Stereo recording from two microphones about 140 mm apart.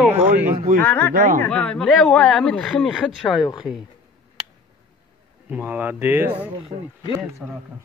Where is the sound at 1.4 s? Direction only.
5° left (ahead or behind).